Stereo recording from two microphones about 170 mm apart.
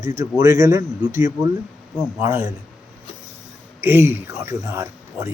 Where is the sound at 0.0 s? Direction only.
20° right (ahead or behind).